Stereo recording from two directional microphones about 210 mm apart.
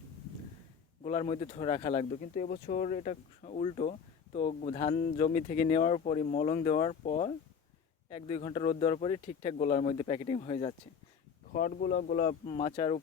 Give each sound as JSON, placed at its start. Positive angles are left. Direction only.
{"t": 1.0, "sound": "speech", "side_deg": 30}
{"t": 11.5, "sound": "speech", "side_deg": 40}
{"t": 12.5, "sound": "speech", "side_deg": 25}